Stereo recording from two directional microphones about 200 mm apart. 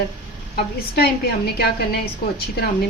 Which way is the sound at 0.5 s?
50° left (ahead or behind).